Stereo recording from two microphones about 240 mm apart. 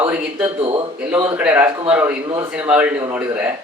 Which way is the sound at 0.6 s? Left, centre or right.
Right.